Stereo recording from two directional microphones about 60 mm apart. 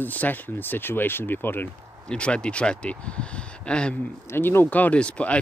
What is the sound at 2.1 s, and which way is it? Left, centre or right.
Speech, centre.